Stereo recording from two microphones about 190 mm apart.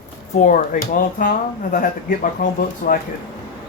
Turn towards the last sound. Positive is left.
turn(degrees=45)  # may be behind; listen again after turning